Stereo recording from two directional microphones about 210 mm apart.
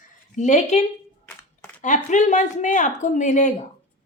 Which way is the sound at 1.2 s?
5° left (ahead or behind).